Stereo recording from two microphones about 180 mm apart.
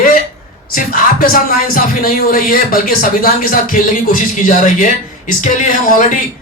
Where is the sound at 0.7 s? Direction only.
50° left (ahead or behind).